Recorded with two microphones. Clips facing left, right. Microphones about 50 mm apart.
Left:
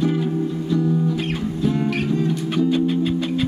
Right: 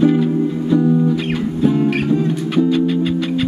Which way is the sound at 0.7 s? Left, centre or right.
Centre.